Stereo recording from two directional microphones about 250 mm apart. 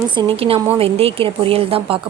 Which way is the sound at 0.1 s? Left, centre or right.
Centre.